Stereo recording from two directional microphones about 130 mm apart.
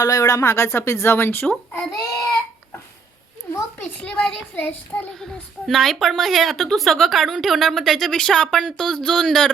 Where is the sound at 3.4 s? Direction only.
15° left (ahead or behind).